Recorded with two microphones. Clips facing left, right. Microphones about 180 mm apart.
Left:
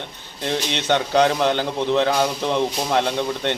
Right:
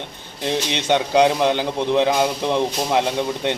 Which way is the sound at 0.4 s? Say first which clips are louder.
Right 1 dB; 15° right (ahead or behind).